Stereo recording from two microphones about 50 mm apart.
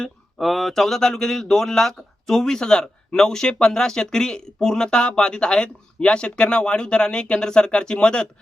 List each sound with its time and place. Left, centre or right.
0.0 s speech: centre